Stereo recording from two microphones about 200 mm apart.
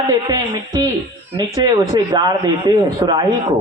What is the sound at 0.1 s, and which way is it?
A man's voice, 20° right (ahead or behind).